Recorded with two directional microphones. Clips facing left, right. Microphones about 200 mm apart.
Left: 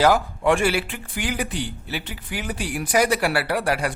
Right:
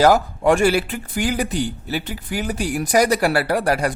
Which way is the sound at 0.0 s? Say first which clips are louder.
Right 3 dB; 40° right (ahead or behind).